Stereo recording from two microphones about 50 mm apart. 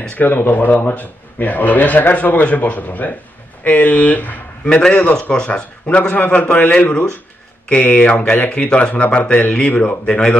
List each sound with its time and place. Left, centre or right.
0.1 s a man's voice: left
4.6 s a man's voice: centre; by 8.5 s left
8.5 s a man's voice: left